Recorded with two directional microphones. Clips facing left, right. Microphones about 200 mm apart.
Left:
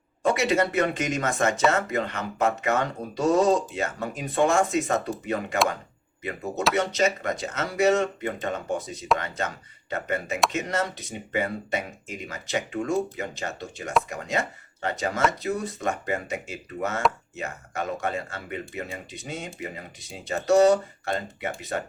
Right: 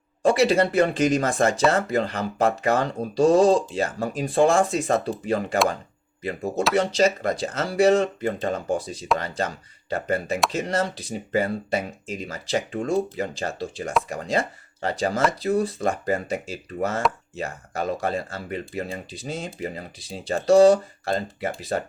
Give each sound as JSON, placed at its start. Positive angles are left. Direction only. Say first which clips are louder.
{"t": 0.2, "sound": "speech", "louder": "right 4 dB", "side_deg": -30}
{"t": 6.7, "sound": "speech", "louder": "right 5 dB", "side_deg": -30}